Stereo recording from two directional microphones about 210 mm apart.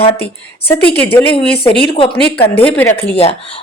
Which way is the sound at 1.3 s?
25° left (ahead or behind).